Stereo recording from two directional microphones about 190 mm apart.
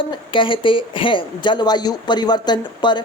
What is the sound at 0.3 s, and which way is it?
A woman's voice, 25° left (ahead or behind).